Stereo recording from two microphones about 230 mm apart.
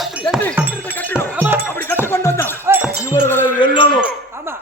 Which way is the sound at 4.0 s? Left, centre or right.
Centre.